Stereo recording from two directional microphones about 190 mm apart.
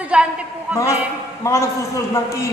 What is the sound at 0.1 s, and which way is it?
Speech, 5° right (ahead or behind).